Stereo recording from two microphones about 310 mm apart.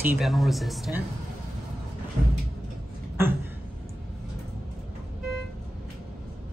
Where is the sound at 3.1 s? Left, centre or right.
Centre.